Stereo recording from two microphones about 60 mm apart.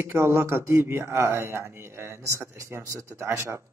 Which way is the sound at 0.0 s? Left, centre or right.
Right.